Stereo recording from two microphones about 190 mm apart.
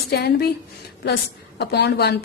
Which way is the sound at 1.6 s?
60° left (ahead or behind).